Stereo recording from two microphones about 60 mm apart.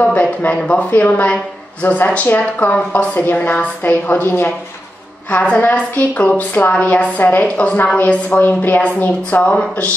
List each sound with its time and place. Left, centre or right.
0.0 s a woman's voice: left
5.3 s speech: left
7.2 s a woman's voice: left
7.5 s a woman's voice: left
9.5 s speech: centre